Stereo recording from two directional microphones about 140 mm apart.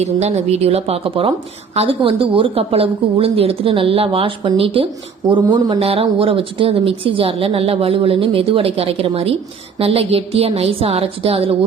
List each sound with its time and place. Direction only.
0.0 s a woman's voice: 50° right (ahead or behind); by 5.8 s 30° right (ahead or behind)
5.8 s a woman's voice: 45° right (ahead or behind)